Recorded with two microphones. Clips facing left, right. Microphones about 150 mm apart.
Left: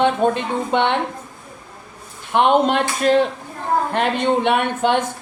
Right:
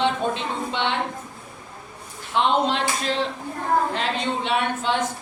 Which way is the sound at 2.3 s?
55° left (ahead or behind).